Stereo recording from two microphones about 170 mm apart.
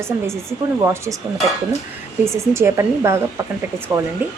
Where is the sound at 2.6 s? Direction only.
15° right (ahead or behind).